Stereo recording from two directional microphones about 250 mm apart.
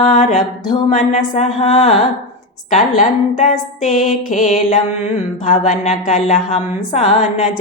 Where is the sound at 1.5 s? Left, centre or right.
Left.